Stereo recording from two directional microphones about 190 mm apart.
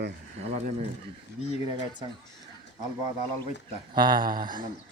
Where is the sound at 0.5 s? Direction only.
35° right (ahead or behind).